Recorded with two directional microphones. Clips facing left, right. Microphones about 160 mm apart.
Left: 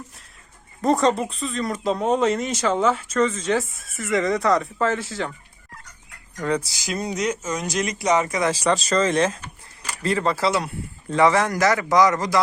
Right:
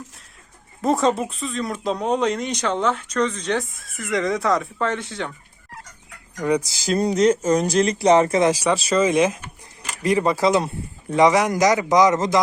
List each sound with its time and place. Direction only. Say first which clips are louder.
0.8 s speech: even; centre (ahead or behind)
6.4 s a man's voice: right 3 dB; 15° right (ahead or behind)
6.7 s speech: right 7 dB; 30° right (ahead or behind)
8.4 s a man's voice: right 2 dB; 10° right (ahead or behind)